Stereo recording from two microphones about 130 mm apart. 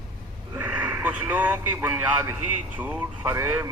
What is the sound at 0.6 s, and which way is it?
A man's voice, 10° right (ahead or behind).